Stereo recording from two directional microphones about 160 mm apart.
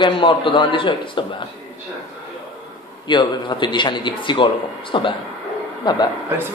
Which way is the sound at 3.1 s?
30° left (ahead or behind).